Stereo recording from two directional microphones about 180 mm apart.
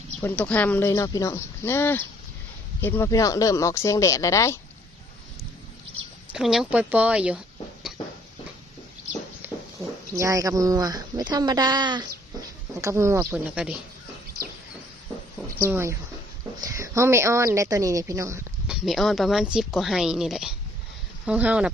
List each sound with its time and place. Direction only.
0.2 s speech: 10° left (ahead or behind)
6.3 s speech: 5° right (ahead or behind)
10.2 s a woman's voice: 15° right (ahead or behind)
15.6 s a woman's voice: 15° right (ahead or behind)
18.7 s a woman's voice: centre (ahead or behind)